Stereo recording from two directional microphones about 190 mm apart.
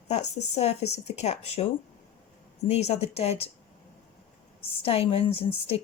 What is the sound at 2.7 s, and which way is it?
Speech, 35° left (ahead or behind).